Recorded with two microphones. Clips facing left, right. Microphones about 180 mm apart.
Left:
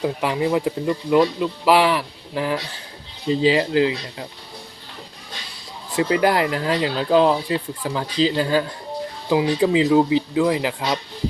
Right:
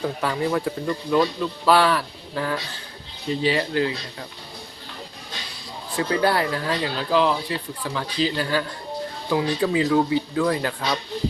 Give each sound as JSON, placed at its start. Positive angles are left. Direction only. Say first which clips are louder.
{"t": 0.0, "sound": "speech", "louder": "left 3 dB", "side_deg": 15}
{"t": 6.0, "sound": "speech", "louder": "left 3 dB", "side_deg": 15}